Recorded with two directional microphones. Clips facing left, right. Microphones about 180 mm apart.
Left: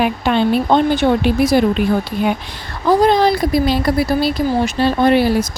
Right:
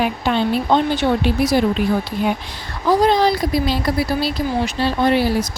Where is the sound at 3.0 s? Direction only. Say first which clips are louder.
Left 2 dB; 55° left (ahead or behind).